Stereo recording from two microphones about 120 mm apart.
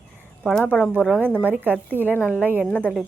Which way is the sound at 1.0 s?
5° right (ahead or behind).